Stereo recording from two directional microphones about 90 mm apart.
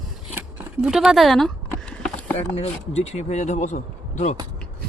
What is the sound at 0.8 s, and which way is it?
Speech, 5° right (ahead or behind).